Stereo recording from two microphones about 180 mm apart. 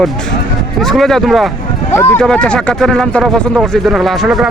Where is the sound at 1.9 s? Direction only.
15° left (ahead or behind).